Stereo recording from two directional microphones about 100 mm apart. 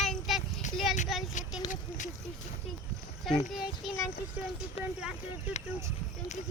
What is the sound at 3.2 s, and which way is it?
Speech, centre (ahead or behind).